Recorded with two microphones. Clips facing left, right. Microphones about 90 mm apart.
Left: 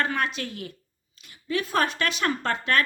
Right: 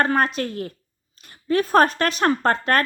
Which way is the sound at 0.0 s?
40° right (ahead or behind).